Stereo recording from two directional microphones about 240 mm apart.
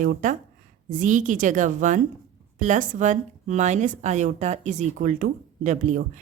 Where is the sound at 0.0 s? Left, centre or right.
Right.